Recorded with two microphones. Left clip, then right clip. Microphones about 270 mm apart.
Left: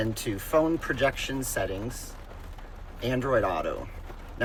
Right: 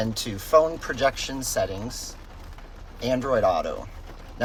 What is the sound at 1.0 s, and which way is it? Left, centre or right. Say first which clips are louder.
Speech: right 3 dB; centre.